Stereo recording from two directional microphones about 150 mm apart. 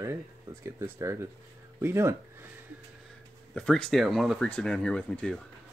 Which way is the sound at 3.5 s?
5° left (ahead or behind).